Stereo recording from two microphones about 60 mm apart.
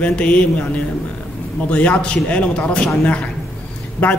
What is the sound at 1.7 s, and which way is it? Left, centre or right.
A man's voice, left.